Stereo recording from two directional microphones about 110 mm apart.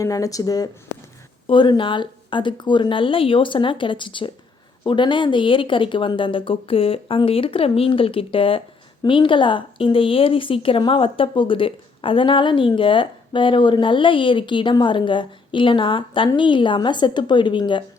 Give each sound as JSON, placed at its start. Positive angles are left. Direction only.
{"t": 0.0, "sound": "speech", "side_deg": 30}
{"t": 1.5, "sound": "speech", "side_deg": 45}